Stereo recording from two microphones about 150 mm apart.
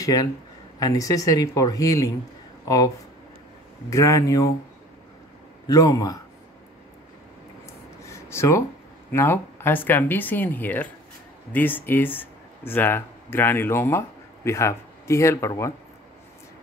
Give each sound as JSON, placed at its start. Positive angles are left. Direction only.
{"t": 0.0, "sound": "speech", "side_deg": 25}
{"t": 3.9, "sound": "speech", "side_deg": 20}
{"t": 5.7, "sound": "speech", "side_deg": 25}
{"t": 8.0, "sound": "a sound", "side_deg": 20}
{"t": 9.1, "sound": "speech", "side_deg": 15}